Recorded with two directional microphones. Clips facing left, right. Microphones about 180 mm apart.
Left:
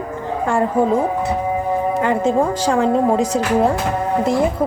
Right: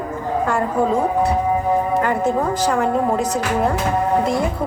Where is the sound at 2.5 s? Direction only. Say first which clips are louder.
Left 2 dB; 30° left (ahead or behind).